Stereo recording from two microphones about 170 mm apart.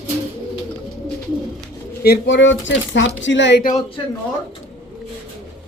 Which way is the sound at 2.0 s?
80° left.